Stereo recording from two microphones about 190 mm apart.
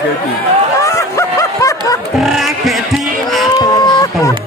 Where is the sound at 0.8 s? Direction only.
15° left (ahead or behind).